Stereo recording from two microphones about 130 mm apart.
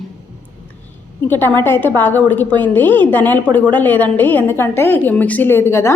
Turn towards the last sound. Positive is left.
turn(degrees=20)  # may be behind; listen again after turning